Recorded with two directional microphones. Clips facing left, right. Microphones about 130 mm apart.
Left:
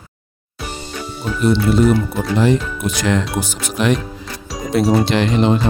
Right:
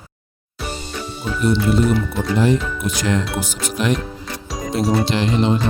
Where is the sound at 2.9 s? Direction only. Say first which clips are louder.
Left 3 dB; 80° left.